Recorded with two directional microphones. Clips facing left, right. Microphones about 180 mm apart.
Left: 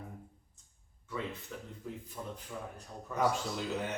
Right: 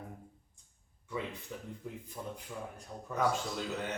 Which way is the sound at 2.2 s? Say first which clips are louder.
Right 1 dB; 20° right (ahead or behind).